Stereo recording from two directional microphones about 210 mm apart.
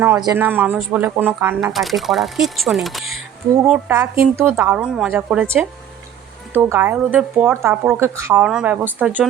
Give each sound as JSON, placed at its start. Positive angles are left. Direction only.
{"t": 0.2, "sound": "speech", "side_deg": -15}